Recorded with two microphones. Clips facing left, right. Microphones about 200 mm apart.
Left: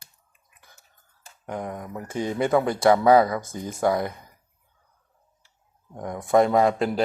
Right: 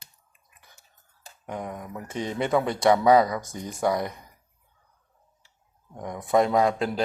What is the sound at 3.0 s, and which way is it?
Speech, 25° left (ahead or behind).